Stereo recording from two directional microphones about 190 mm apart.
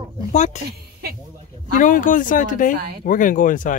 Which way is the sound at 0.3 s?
40° left (ahead or behind).